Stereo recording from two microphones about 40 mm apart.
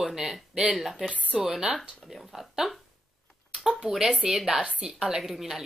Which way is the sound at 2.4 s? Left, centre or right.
Centre.